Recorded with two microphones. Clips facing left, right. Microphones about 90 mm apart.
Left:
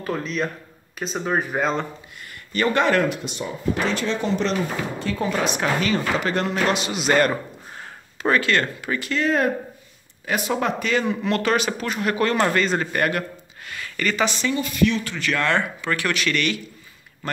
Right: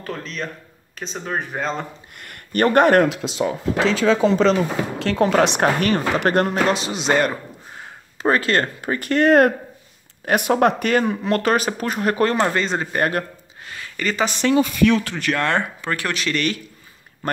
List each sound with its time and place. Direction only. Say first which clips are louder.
0.0 s speech: left 4 dB; 5° left (ahead or behind)
2.1 s speech: right 4 dB; 55° right (ahead or behind)
3.1 s speech: right 6 dB; 90° right
4.9 s speech: right 9 dB; 75° right (ahead or behind)
5.6 s speech: right 4 dB; 55° right (ahead or behind)
6.7 s a man's voice: right 1 dB; 30° right (ahead or behind)
8.2 s speech: right 2 dB; 35° right (ahead or behind)
9.1 s speech: right 7 dB; 60° right (ahead or behind); by 12.4 s 35° right (ahead or behind)
12.4 s a man's voice: even; 25° right (ahead or behind)
13.7 s a sound: even; 25° right (ahead or behind)
14.4 s speech: right 9 dB; 90° right
15.1 s speech: right 1 dB; 50° right (ahead or behind)